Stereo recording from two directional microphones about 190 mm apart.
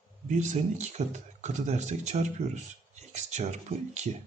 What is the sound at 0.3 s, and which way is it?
Speech, 40° right (ahead or behind).